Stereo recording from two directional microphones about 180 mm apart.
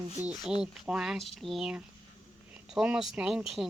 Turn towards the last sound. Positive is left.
turn(degrees=-5)  # may be behind; listen again after turning